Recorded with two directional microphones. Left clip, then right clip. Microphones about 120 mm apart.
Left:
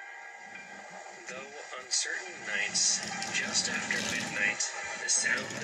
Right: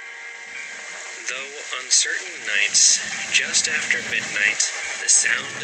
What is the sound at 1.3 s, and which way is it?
Speech, 25° right (ahead or behind).